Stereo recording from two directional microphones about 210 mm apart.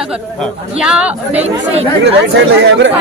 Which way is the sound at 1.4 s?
30° right (ahead or behind).